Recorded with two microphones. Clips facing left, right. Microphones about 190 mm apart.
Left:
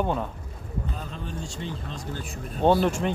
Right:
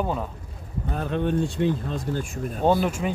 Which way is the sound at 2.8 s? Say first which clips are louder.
Left 1 dB; 5° right (ahead or behind).